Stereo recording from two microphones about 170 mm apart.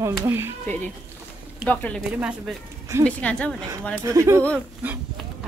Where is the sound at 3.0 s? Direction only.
5° left (ahead or behind).